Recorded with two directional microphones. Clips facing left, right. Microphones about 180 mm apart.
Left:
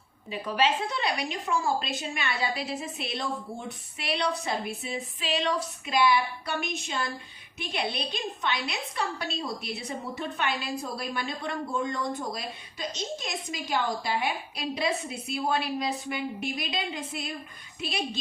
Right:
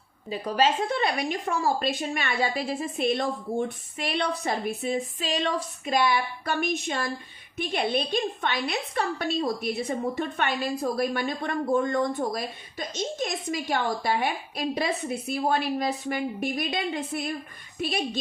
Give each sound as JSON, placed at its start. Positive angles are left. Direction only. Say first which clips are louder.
{"t": 0.3, "sound": "a woman's voice", "louder": "right 3 dB", "side_deg": -40}